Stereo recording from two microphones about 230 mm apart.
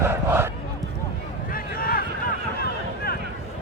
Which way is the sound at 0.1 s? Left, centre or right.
Centre.